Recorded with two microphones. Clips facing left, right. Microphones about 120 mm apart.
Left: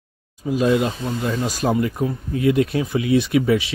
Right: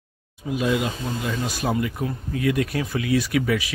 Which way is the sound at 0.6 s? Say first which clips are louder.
Left 5 dB; 40° left (ahead or behind).